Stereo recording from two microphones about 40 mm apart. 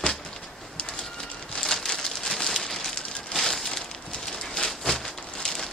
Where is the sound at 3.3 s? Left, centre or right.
Centre.